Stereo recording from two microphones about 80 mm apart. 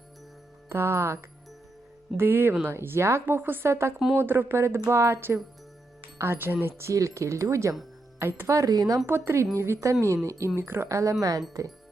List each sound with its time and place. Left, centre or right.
0.7 s speech: right
9.0 s speech: right